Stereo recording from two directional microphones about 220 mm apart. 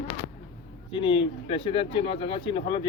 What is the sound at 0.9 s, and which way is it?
Speech, 25° left (ahead or behind).